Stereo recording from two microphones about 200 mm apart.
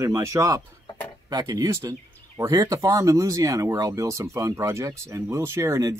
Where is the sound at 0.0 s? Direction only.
15° right (ahead or behind).